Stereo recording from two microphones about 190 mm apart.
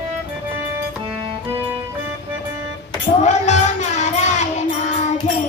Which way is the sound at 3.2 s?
35° left (ahead or behind).